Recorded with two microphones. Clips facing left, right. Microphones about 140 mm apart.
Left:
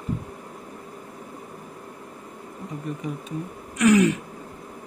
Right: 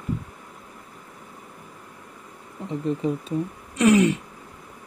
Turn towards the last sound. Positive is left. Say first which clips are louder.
# even
turn(degrees=-25)  # may be behind; listen again after turning